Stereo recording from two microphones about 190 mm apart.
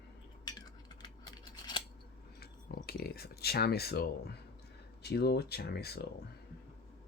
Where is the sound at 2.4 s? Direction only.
55° left (ahead or behind).